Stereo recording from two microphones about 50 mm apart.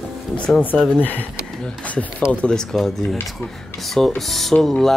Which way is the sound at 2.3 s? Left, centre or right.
Left.